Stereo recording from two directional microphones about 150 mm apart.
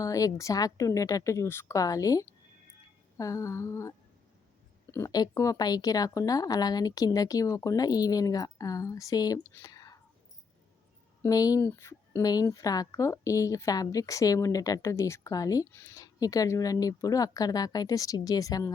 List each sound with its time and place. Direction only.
0.0 s speech: 20° left (ahead or behind)
9.5 s whispering: 20° left (ahead or behind)
11.2 s speech: 25° left (ahead or behind)